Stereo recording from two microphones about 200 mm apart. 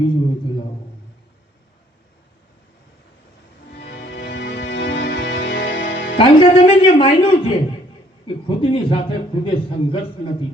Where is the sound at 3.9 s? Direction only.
60° left (ahead or behind).